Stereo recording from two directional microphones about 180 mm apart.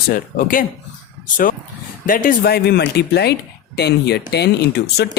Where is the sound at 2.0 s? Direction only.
50° left (ahead or behind).